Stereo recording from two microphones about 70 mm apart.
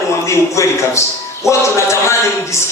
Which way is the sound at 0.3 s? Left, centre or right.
Left.